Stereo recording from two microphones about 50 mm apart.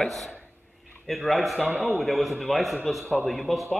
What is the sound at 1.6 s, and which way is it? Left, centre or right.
Speech, right.